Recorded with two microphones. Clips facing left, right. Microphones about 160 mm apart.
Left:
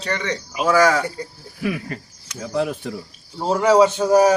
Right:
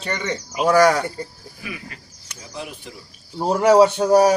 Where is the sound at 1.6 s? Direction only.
50° left (ahead or behind).